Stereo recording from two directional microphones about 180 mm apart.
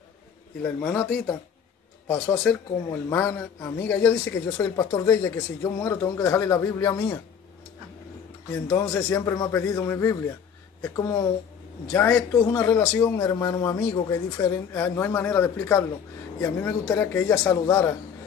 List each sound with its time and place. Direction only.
0.7 s speech: 10° left (ahead or behind)
8.6 s speech: 15° left (ahead or behind)